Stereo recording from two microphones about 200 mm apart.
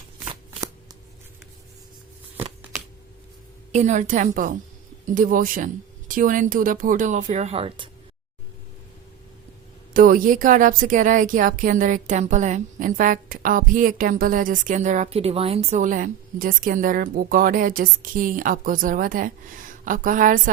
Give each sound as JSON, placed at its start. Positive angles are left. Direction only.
{"t": 3.7, "sound": "a woman's voice", "side_deg": -35}
{"t": 9.9, "sound": "a woman's voice", "side_deg": -45}